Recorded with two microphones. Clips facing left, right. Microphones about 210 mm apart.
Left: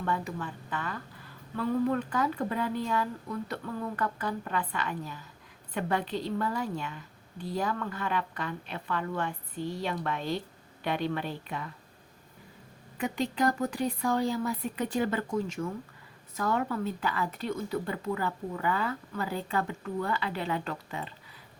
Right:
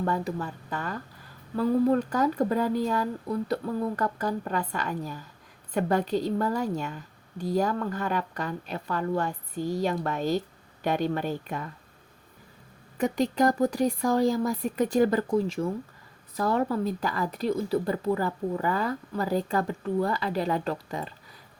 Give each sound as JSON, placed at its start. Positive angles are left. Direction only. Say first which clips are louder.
{"t": 0.0, "sound": "a woman's voice", "louder": "right 4 dB", "side_deg": -40}
{"t": 13.0, "sound": "speech", "louder": "right 5 dB", "side_deg": -40}